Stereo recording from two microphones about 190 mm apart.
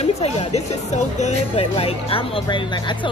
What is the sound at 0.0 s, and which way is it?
Speech, 35° left (ahead or behind).